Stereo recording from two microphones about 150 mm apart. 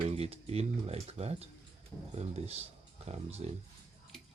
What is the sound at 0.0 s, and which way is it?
Speech, 40° right (ahead or behind).